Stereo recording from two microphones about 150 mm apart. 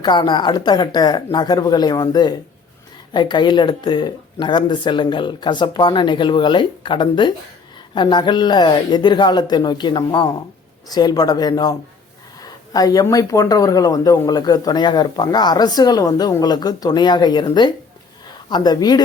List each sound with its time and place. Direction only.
0.0 s a woman's voice: 30° left (ahead or behind)